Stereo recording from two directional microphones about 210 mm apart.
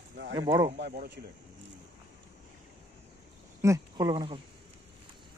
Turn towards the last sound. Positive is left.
turn(degrees=-20)  # may be behind; listen again after turning